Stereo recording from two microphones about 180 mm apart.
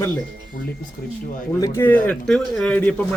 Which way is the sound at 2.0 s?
5° left (ahead or behind).